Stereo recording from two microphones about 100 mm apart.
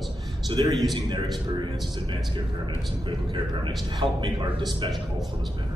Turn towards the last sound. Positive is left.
turn(degrees=-55)  # may be behind; listen again after turning